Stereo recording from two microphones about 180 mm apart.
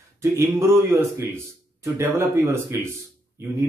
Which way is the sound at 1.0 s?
15° right (ahead or behind).